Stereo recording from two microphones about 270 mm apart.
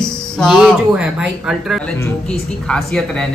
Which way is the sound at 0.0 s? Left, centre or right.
Centre.